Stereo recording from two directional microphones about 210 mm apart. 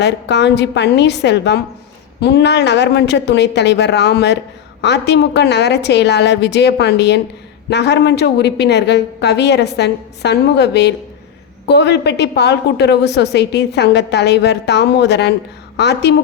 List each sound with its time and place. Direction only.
0.0 s a woman's voice: 55° left (ahead or behind)